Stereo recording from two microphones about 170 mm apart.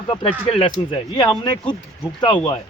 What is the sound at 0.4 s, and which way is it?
Speech, 30° left (ahead or behind).